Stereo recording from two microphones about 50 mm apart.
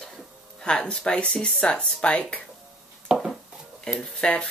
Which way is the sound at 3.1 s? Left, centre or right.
Centre.